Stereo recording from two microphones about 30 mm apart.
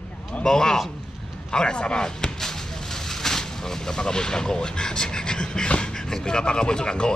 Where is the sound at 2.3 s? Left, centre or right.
Centre.